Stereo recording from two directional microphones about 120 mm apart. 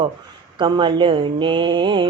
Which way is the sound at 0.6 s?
40° right (ahead or behind).